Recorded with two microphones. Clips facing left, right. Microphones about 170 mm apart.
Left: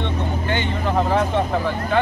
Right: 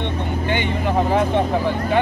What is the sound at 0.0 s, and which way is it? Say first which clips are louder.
Vehicle: right 1 dB; 15° right (ahead or behind).